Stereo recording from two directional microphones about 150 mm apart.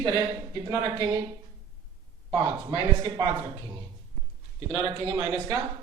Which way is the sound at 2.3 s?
30° right (ahead or behind).